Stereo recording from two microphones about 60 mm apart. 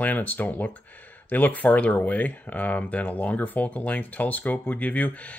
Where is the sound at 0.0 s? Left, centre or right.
Left.